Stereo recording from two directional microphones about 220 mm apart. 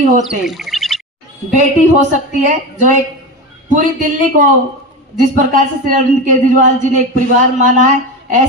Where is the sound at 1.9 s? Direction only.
35° right (ahead or behind).